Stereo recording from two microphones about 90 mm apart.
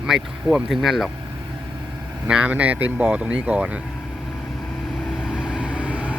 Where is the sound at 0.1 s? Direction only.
5° right (ahead or behind).